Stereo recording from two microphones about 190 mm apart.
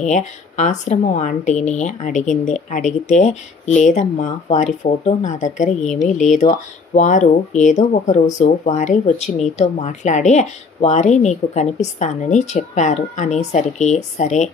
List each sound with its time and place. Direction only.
0.0 s speech: 40° left (ahead or behind)